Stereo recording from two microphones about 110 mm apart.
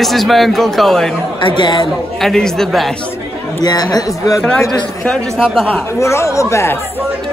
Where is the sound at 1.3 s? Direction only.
45° left (ahead or behind).